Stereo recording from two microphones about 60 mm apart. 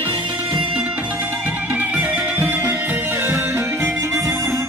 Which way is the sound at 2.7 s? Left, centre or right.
Right.